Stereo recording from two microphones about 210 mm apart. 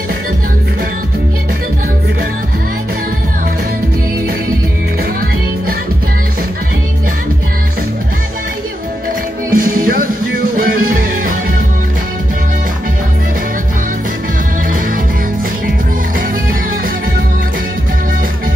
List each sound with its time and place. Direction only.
9.5 s music: 45° right (ahead or behind)